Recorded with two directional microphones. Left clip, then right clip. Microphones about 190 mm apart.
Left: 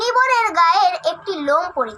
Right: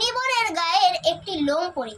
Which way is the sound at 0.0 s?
10° left (ahead or behind).